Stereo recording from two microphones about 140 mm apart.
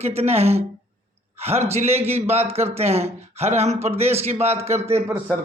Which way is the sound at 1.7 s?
50° right (ahead or behind).